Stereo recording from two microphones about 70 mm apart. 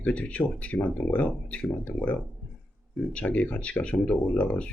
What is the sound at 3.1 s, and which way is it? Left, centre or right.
Speech, centre.